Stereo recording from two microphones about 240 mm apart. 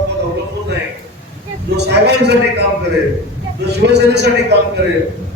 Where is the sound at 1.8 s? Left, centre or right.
Right.